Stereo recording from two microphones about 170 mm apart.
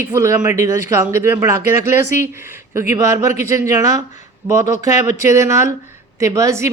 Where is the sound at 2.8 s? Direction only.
15° right (ahead or behind).